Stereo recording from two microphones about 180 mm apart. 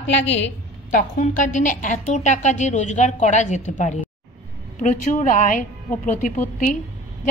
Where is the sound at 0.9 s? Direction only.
45° left (ahead or behind).